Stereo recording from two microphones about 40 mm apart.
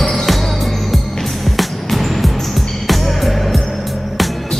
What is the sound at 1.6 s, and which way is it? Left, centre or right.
Music, centre.